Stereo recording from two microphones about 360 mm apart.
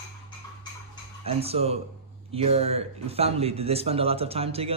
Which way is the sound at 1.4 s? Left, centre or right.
Centre.